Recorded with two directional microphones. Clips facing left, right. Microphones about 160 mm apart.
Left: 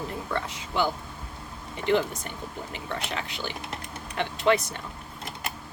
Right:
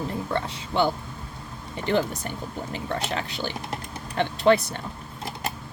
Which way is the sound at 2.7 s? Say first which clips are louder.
Right 5 dB; 35° right (ahead or behind).